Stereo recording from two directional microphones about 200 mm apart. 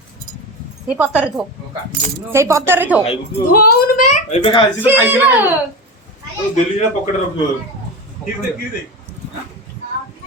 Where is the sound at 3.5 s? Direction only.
45° left (ahead or behind).